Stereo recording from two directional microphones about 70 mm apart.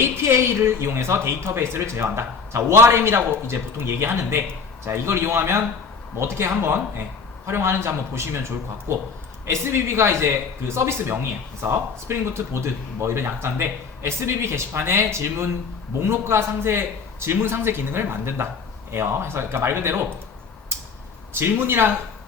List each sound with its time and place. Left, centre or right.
0.0 s speech: right
21.3 s speech: right